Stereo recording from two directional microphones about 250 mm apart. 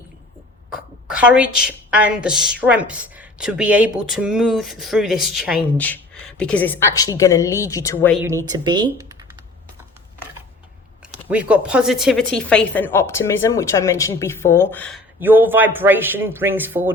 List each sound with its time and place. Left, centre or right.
0.7 s a woman's voice: centre
8.4 s speech: centre
11.3 s speech: centre
15.2 s a man's voice: centre